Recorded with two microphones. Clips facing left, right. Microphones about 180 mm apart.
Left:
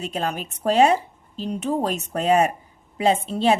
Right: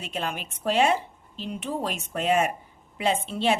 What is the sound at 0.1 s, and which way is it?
A woman's voice, 40° left (ahead or behind).